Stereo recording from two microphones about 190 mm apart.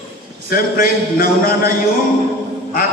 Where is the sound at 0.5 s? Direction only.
50° left (ahead or behind).